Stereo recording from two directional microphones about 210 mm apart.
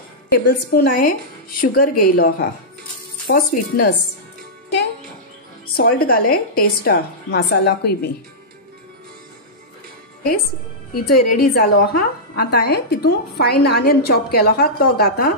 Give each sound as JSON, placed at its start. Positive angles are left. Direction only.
{"t": 0.3, "sound": "a woman's voice", "side_deg": 45}
{"t": 5.8, "sound": "a woman's voice", "side_deg": 45}
{"t": 11.0, "sound": "a woman's voice", "side_deg": 45}